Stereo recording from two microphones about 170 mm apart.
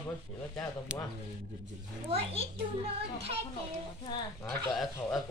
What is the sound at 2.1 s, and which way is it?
Speech, 35° right (ahead or behind).